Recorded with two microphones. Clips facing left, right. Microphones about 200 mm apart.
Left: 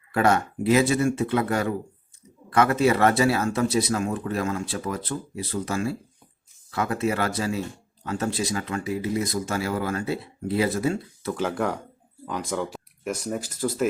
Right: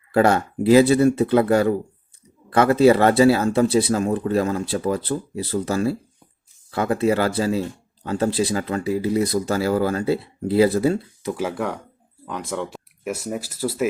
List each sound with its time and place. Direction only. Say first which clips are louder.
0.1 s speech: right 4 dB; 30° right (ahead or behind)
11.2 s speech: right 2 dB; 15° right (ahead or behind)
11.4 s speech: left 2 dB; centre (ahead or behind)